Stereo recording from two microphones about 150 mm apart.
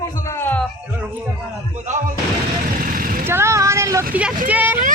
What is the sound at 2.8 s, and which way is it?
Vehicle, 65° right (ahead or behind).